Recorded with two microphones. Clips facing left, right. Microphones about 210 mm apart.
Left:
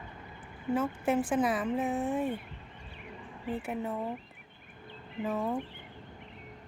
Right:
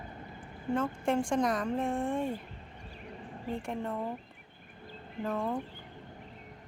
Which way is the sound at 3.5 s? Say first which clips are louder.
Left 1 dB; 5° left (ahead or behind).